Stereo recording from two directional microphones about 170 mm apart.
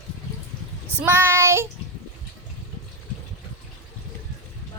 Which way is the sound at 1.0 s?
15° right (ahead or behind).